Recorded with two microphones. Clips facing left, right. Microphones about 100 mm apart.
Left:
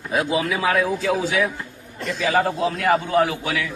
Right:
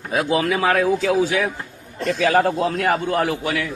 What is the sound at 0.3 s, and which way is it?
Speech, 60° right (ahead or behind).